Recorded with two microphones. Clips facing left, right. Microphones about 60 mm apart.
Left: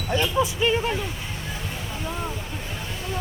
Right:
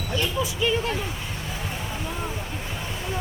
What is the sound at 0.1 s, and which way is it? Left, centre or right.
Speech, left.